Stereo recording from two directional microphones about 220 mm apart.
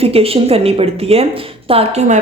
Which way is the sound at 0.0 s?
25° right (ahead or behind).